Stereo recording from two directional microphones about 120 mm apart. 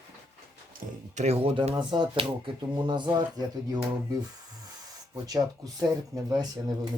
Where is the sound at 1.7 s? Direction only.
40° right (ahead or behind).